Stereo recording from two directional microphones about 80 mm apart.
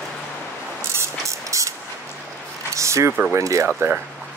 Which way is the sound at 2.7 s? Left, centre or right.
Right.